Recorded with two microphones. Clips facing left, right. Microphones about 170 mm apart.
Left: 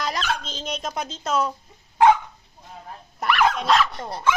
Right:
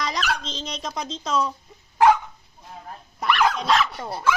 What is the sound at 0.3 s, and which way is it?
Speech, 5° left (ahead or behind).